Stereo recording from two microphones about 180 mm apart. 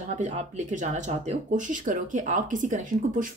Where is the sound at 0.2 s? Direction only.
40° right (ahead or behind).